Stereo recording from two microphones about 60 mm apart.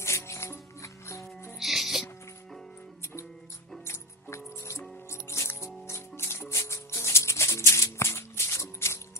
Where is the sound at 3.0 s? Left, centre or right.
Left.